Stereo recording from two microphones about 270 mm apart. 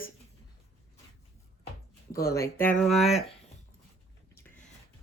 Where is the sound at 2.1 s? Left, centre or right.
Left.